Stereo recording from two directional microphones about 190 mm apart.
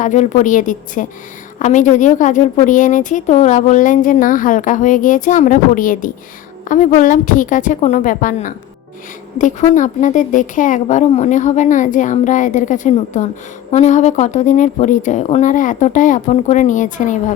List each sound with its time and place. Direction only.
0.0 s a woman's voice: 40° left (ahead or behind)